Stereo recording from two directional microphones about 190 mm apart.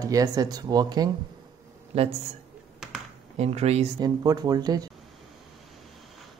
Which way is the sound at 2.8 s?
Centre (ahead or behind).